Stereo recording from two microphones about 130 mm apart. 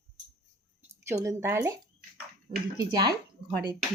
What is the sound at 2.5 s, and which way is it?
Speech, 40° right (ahead or behind).